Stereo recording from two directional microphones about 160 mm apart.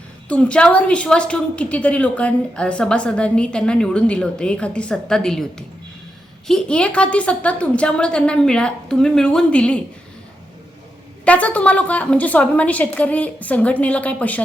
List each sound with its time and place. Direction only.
0.3 s a woman's voice: 5° left (ahead or behind)
11.3 s a woman's voice: 10° left (ahead or behind)